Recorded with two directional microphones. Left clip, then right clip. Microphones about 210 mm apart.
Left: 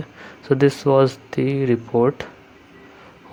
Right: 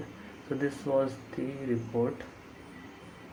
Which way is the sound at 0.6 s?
50° left (ahead or behind).